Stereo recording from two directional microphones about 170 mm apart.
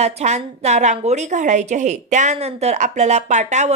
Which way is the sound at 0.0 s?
40° right (ahead or behind).